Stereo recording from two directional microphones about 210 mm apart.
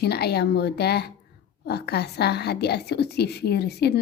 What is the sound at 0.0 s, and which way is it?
A woman's voice, 50° left (ahead or behind).